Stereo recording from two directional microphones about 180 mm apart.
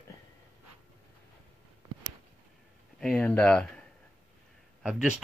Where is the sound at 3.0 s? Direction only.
5° left (ahead or behind).